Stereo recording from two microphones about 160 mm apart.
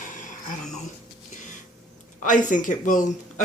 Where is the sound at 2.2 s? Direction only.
55° left (ahead or behind).